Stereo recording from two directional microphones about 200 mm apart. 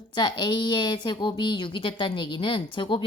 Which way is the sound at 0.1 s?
20° left (ahead or behind).